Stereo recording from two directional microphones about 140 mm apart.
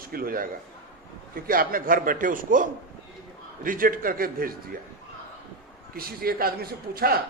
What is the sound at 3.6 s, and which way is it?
Speech, 85° right.